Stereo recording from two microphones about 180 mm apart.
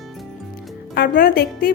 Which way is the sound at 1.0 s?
60° left (ahead or behind).